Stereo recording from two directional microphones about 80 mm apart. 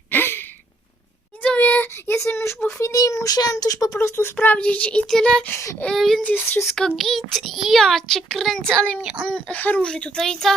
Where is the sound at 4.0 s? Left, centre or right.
Left.